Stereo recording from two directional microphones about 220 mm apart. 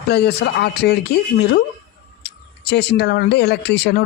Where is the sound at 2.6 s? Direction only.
50° left (ahead or behind).